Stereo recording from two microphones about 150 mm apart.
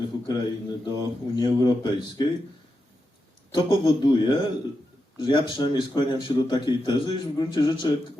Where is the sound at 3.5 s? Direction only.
30° left (ahead or behind).